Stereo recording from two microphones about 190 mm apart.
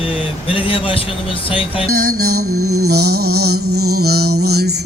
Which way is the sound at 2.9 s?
55° right (ahead or behind).